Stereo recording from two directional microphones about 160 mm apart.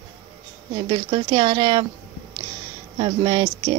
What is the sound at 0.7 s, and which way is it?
A woman's voice, 30° right (ahead or behind).